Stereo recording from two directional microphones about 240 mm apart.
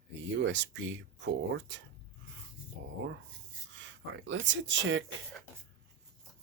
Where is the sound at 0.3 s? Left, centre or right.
Right.